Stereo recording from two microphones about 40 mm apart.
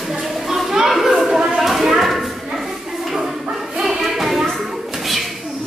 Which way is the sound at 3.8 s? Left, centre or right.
Centre.